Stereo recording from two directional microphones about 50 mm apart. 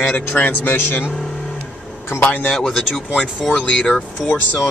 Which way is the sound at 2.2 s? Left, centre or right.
Left.